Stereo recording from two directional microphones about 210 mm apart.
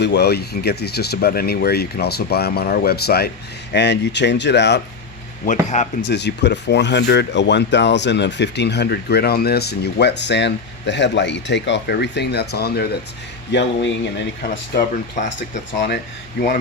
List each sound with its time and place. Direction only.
0.0 s speech: 55° left (ahead or behind)
5.7 s speech: 35° left (ahead or behind)
6.1 s speech: 55° left (ahead or behind)
14.8 s speech: 35° left (ahead or behind)
16.4 s speech: 45° left (ahead or behind)